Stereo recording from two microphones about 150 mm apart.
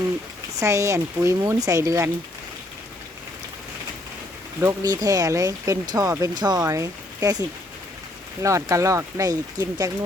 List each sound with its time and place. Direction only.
0.6 s speech: 20° right (ahead or behind)
4.6 s speech: 25° right (ahead or behind)